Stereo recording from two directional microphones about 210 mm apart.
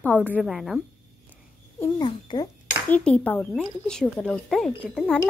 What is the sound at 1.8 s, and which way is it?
Speech, 20° left (ahead or behind).